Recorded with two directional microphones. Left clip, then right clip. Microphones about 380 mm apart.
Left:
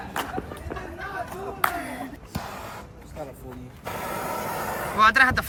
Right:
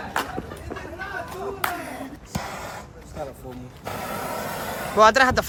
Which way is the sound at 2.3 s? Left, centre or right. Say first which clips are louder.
Right 5 dB; right.